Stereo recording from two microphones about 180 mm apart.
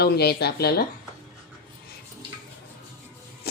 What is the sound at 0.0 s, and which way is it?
Speech, 65° left (ahead or behind).